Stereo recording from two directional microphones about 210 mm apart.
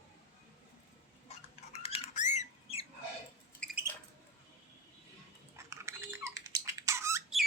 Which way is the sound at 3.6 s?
5° left (ahead or behind).